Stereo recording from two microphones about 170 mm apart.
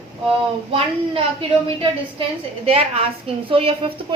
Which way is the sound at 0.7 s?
35° right (ahead or behind).